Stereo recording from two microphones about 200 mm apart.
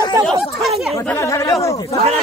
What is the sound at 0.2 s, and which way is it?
Speech, centre (ahead or behind).